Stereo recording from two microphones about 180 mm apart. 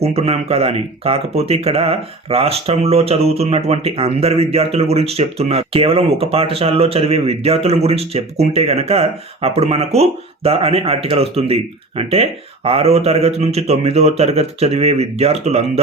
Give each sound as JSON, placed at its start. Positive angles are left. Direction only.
{"t": 0.0, "sound": "speech", "side_deg": -35}